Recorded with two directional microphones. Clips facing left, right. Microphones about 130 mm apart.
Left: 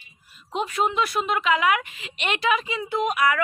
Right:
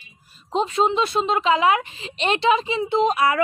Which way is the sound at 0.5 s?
25° right (ahead or behind).